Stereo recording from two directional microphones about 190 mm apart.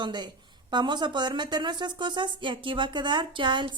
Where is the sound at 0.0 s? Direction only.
25° right (ahead or behind).